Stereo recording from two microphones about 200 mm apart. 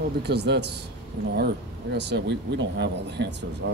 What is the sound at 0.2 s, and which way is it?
Speech, 55° right (ahead or behind).